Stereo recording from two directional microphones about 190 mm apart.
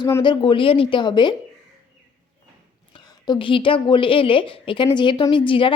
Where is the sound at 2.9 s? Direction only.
25° left (ahead or behind).